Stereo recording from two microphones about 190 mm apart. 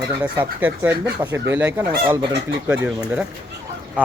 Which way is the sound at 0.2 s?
10° right (ahead or behind).